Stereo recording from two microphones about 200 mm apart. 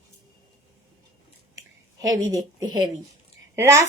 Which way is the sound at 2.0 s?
15° right (ahead or behind).